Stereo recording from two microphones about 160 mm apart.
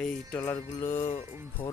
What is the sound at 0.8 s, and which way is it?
Music, 15° left (ahead or behind).